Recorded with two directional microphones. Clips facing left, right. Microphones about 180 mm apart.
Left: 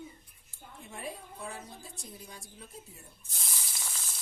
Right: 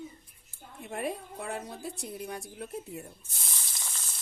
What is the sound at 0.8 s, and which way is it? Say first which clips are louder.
A woman's voice: right 8 dB; 65° right (ahead or behind).